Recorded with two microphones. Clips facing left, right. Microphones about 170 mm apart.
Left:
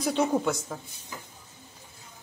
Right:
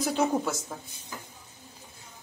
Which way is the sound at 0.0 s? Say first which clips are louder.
Left 1 dB; 5° right (ahead or behind).